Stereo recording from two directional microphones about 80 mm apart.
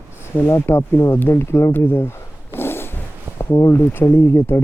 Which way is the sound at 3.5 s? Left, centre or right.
Left.